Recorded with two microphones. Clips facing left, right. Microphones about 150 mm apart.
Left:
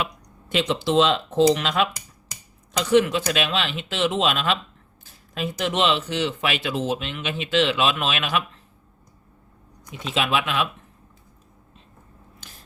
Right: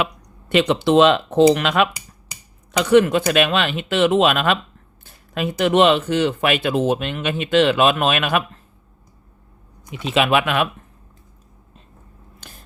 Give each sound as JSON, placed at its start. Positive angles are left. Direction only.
{"t": 0.0, "sound": "speech", "side_deg": -65}
{"t": 10.0, "sound": "speech", "side_deg": -65}